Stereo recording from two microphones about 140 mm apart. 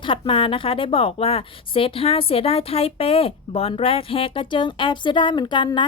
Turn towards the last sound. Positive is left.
turn(degrees=35)  # may be behind; listen again after turning